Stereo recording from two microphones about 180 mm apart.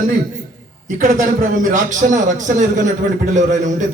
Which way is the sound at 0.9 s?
45° right (ahead or behind).